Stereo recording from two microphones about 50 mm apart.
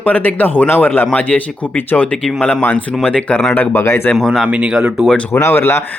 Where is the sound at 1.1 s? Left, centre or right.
Left.